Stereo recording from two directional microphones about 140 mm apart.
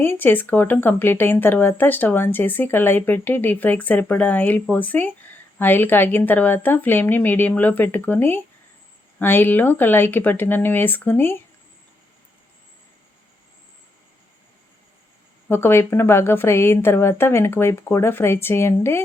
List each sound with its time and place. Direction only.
0.0 s speech: 15° left (ahead or behind)
15.4 s speech: 15° left (ahead or behind)